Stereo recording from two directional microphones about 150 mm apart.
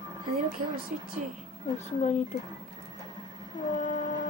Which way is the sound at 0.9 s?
60° right (ahead or behind).